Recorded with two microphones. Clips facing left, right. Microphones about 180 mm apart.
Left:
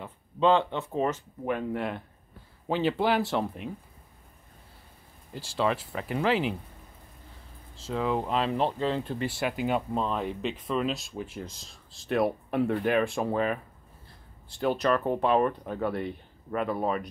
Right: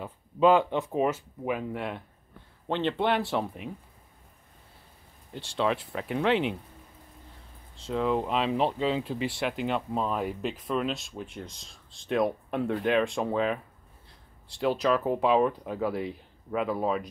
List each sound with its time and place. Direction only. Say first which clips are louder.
0.0 s speech: right 2 dB; 10° right (ahead or behind)
5.3 s speech: even; 5° left (ahead or behind)
7.7 s speech: right 1 dB; centre (ahead or behind)
10.0 s speech: even; 5° right (ahead or behind)